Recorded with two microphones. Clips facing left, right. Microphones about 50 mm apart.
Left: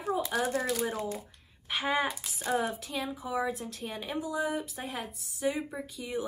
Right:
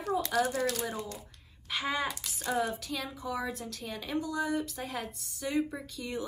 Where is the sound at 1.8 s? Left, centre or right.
Centre.